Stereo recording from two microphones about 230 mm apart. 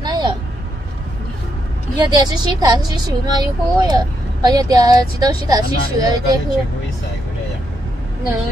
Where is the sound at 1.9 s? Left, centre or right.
Centre.